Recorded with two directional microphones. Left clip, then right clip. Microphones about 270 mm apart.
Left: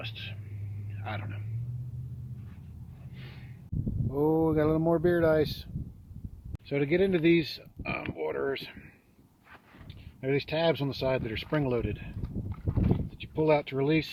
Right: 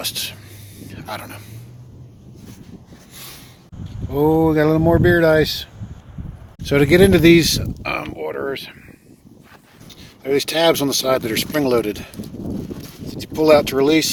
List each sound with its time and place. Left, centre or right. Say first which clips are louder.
0.0 s speech: right 15 dB; right
4.1 s speech: right 11 dB; centre
6.7 s speech: right 14 dB; centre
10.2 s speech: right 11 dB; centre
13.2 s speech: right 13 dB; centre